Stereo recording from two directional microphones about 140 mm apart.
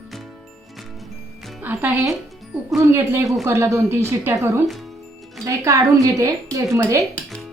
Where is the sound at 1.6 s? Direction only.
10° right (ahead or behind).